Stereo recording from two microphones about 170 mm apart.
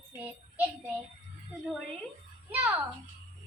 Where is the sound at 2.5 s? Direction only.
10° right (ahead or behind).